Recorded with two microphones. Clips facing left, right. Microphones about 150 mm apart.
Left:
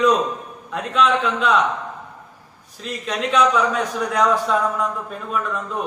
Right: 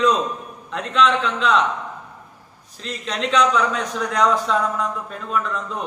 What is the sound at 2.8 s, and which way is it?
A man's voice, 5° left (ahead or behind).